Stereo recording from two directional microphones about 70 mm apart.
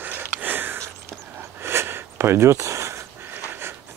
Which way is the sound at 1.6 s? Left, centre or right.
Right.